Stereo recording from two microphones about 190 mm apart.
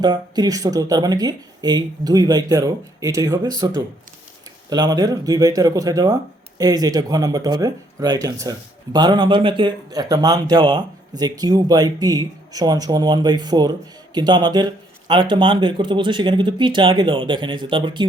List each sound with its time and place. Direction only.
0.0 s speech: 20° right (ahead or behind)